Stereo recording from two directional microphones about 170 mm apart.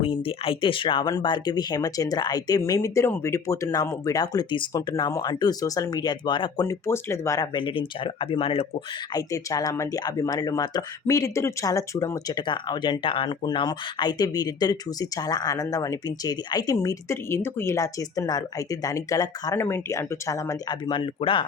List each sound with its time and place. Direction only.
0.0 s speech: 30° left (ahead or behind)
9.1 s speech: 20° left (ahead or behind)